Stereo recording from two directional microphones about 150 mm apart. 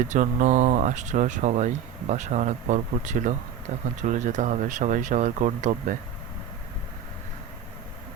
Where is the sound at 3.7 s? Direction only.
65° right (ahead or behind).